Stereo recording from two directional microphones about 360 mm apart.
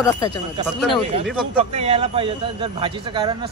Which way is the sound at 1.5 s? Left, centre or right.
Centre.